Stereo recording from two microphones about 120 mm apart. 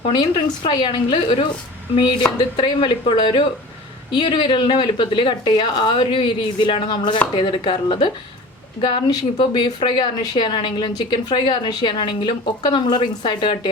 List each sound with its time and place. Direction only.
0.2 s a woman's voice: 40° left (ahead or behind)